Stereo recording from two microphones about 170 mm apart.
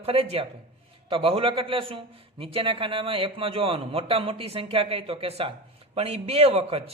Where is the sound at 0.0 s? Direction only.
35° right (ahead or behind).